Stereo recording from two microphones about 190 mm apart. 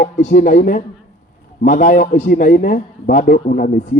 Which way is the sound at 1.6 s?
45° left (ahead or behind).